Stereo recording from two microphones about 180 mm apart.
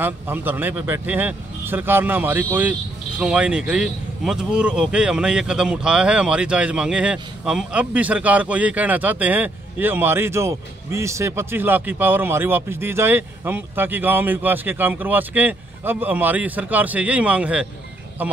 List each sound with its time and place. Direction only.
0.0 s speech: 10° right (ahead or behind)